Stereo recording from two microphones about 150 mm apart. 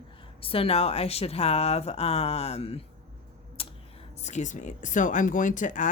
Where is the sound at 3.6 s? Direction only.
40° left (ahead or behind).